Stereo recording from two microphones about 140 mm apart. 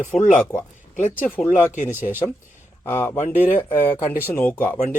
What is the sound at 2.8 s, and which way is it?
A man's voice, 20° left (ahead or behind).